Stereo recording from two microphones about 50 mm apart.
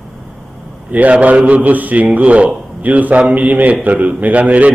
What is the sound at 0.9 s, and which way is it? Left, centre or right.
A man's voice, right.